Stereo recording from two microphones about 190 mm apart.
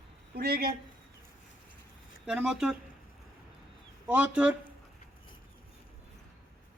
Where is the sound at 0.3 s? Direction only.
55° right (ahead or behind).